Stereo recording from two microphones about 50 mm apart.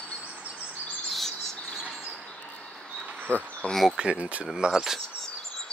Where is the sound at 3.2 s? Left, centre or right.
Left.